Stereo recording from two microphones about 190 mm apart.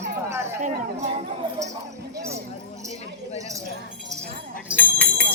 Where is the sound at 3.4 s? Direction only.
15° right (ahead or behind).